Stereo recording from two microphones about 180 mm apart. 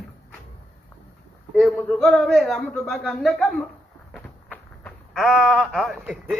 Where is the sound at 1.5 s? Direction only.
5° left (ahead or behind).